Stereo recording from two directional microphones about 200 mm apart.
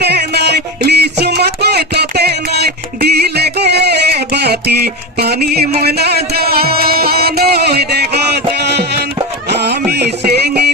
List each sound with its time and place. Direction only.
0.0 s music: 55° right (ahead or behind)